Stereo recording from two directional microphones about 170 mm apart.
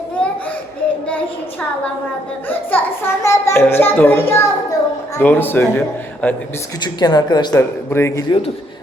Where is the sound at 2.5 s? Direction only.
10° left (ahead or behind).